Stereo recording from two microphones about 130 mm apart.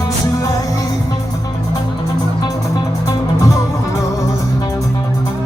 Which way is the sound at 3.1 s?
25° left (ahead or behind).